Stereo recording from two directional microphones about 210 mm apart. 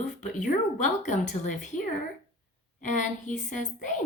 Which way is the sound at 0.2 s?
35° left (ahead or behind).